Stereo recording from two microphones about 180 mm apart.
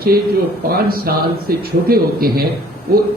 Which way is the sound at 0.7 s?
55° right (ahead or behind).